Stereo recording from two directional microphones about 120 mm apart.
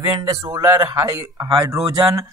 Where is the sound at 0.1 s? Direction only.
30° right (ahead or behind).